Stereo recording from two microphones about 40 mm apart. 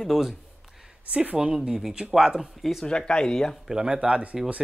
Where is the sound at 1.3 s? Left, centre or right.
Centre.